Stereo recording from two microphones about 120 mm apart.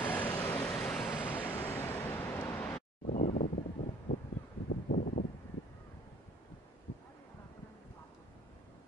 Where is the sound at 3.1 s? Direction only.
90° left.